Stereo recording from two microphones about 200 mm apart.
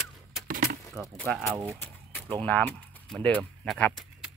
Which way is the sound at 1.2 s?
5° left (ahead or behind).